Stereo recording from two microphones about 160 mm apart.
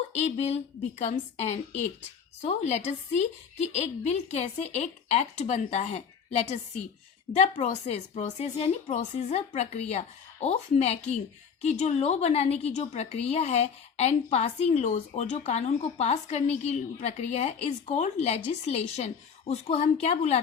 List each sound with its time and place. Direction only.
0.1 s a woman's voice: 45° left (ahead or behind)